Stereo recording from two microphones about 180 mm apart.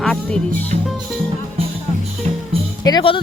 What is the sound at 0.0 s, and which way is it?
Music, 5° left (ahead or behind).